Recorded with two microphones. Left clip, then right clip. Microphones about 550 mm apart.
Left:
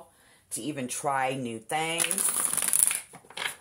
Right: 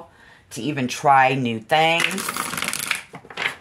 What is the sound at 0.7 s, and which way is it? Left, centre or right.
Speech, centre.